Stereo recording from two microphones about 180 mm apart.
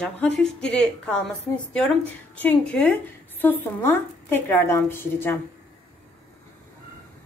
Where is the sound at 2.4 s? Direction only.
5° left (ahead or behind).